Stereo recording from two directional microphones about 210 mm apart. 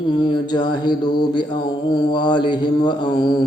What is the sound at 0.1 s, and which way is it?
Mantra, 20° left (ahead or behind).